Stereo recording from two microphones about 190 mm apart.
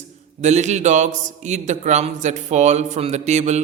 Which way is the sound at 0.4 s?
35° right (ahead or behind).